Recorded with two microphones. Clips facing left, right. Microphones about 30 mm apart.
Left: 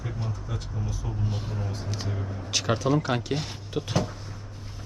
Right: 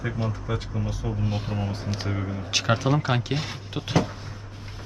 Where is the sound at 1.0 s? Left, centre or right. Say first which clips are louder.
Right 4 dB; right.